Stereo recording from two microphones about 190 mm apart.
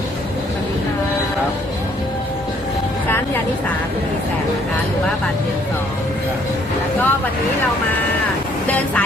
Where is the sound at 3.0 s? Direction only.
10° left (ahead or behind).